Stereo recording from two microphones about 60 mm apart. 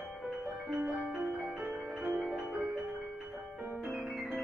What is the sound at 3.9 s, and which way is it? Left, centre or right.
Piano, centre.